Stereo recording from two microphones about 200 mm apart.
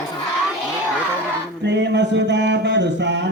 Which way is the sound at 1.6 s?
60° right (ahead or behind).